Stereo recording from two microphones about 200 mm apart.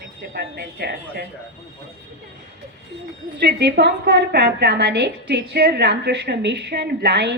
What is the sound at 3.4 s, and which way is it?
A woman's voice, 55° right (ahead or behind).